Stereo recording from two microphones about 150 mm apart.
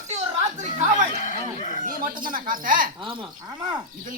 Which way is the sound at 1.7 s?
65° right (ahead or behind).